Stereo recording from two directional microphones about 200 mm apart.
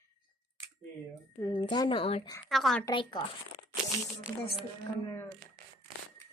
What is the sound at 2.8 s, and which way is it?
Speech, 25° left (ahead or behind).